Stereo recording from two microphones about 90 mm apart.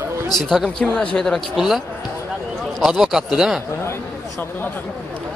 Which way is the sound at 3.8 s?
25° left (ahead or behind).